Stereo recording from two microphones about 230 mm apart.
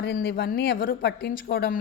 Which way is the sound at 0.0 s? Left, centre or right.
Left.